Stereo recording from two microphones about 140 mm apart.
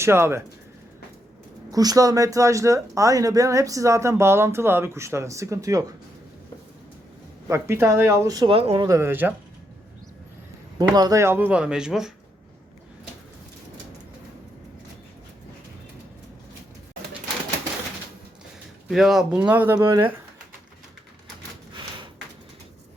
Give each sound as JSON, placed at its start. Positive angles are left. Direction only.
{"t": 0.0, "sound": "speech", "side_deg": -15}
{"t": 1.7, "sound": "speech", "side_deg": -25}
{"t": 7.4, "sound": "speech", "side_deg": -20}
{"t": 8.4, "sound": "speech", "side_deg": -40}
{"t": 8.8, "sound": "speech", "side_deg": -20}
{"t": 10.8, "sound": "speech", "side_deg": -30}
{"t": 18.9, "sound": "speech", "side_deg": -5}